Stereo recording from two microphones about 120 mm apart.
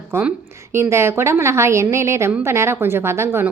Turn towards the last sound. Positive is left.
turn(degrees=-20)  # may be behind; listen again after turning